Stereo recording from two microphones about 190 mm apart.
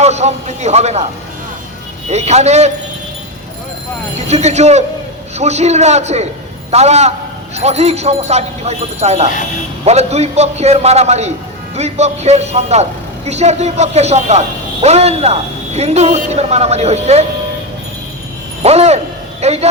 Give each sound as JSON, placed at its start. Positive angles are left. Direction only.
{"t": 0.0, "sound": "a man's voice", "side_deg": -35}
{"t": 2.0, "sound": "a man's voice", "side_deg": -35}
{"t": 4.3, "sound": "a man's voice", "side_deg": -35}
{"t": 18.6, "sound": "a man's voice", "side_deg": -35}